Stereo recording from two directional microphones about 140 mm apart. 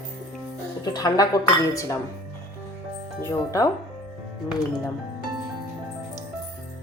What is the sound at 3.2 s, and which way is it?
Speech, 25° left (ahead or behind).